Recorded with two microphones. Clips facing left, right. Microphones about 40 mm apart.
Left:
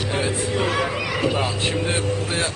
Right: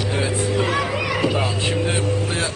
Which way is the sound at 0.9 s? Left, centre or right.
Centre.